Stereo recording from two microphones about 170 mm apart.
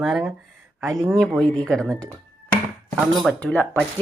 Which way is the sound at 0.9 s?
20° right (ahead or behind).